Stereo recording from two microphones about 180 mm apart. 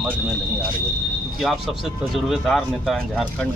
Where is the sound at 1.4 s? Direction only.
Centre (ahead or behind).